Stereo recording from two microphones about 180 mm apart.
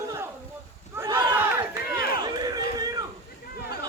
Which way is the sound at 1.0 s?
20° right (ahead or behind).